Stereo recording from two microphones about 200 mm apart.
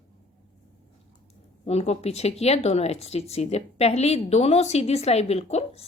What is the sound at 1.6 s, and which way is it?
Speech, 30° left (ahead or behind).